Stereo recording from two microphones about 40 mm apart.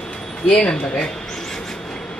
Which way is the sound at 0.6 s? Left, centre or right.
Centre.